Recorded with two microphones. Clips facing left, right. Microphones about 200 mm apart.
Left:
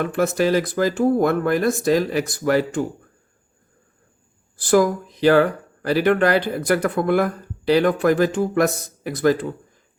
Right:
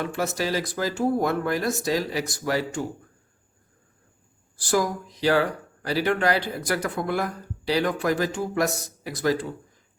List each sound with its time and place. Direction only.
0.0 s speech: 55° left (ahead or behind)
4.6 s speech: 55° left (ahead or behind)